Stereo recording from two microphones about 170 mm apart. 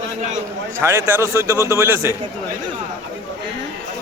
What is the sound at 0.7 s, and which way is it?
A man's voice, 15° right (ahead or behind).